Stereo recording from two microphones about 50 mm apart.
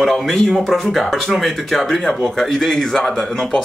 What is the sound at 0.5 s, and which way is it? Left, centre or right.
Speech, centre.